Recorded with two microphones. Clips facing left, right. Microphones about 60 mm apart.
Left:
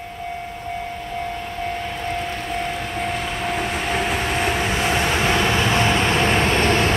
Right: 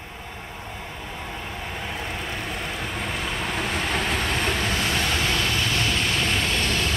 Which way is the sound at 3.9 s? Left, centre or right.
Centre.